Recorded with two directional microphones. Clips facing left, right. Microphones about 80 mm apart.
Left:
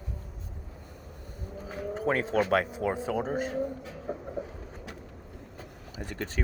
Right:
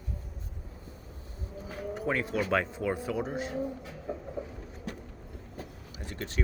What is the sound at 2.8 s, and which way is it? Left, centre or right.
Speech, left.